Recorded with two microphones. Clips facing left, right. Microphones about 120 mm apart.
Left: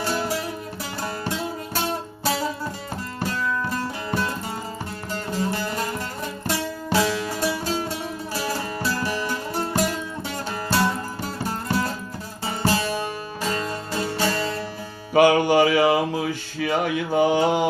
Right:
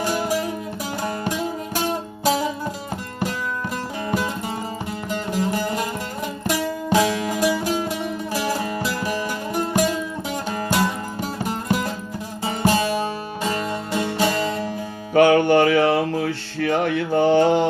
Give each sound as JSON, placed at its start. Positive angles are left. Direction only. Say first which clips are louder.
{"t": 0.0, "sound": "music", "louder": "right 3 dB", "side_deg": -15}
{"t": 3.7, "sound": "music", "louder": "right 2 dB", "side_deg": -15}
{"t": 5.3, "sound": "music", "louder": "right 3 dB", "side_deg": -15}
{"t": 15.1, "sound": "music", "louder": "right 2 dB", "side_deg": 5}